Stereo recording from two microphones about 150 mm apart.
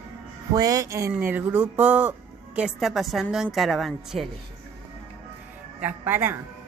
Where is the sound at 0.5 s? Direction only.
25° right (ahead or behind); by 4.3 s centre (ahead or behind).